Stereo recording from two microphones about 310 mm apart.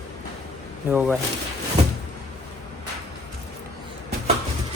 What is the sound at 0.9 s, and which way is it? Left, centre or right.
Speech, centre.